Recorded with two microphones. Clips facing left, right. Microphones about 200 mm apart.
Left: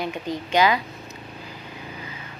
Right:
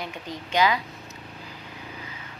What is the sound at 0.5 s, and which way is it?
Speech, 70° left (ahead or behind).